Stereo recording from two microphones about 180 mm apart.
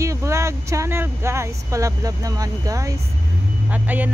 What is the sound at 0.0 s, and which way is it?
Speech, 15° right (ahead or behind).